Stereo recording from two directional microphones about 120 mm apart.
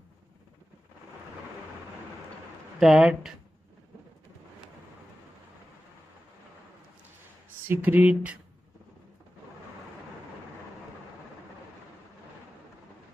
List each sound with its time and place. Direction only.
2.8 s speech: 5° right (ahead or behind)
7.6 s speech: 15° right (ahead or behind)